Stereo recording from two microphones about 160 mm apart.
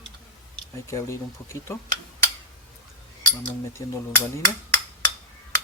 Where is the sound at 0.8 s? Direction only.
20° left (ahead or behind).